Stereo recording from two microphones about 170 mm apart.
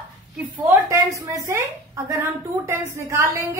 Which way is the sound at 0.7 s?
15° right (ahead or behind).